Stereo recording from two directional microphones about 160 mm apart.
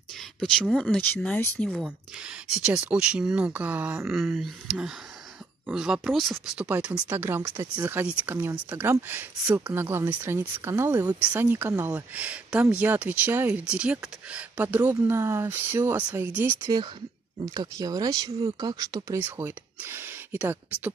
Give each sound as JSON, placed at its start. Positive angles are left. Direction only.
{"t": 0.4, "sound": "speech", "side_deg": 5}
{"t": 1.1, "sound": "speech", "side_deg": 10}
{"t": 4.4, "sound": "speech", "side_deg": 0}
{"t": 17.6, "sound": "speech", "side_deg": -25}